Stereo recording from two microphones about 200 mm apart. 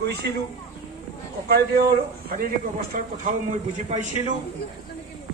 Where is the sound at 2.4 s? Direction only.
45° right (ahead or behind).